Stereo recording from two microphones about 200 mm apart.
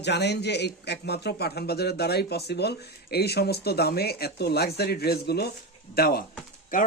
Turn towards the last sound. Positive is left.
turn(degrees=45)  # may be behind; listen again after turning